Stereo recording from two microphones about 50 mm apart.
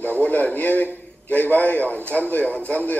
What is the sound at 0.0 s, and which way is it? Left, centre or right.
A man's voice, left.